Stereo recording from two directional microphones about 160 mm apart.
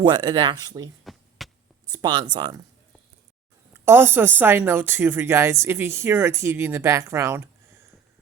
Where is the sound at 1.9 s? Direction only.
25° right (ahead or behind).